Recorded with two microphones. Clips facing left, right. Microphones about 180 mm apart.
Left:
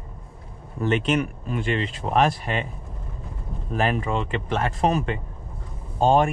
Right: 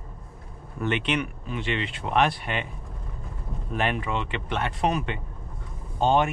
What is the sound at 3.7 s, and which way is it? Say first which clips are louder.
Speech: left 3 dB; 35° left (ahead or behind).